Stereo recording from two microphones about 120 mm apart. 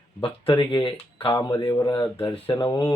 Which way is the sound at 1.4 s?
35° left (ahead or behind).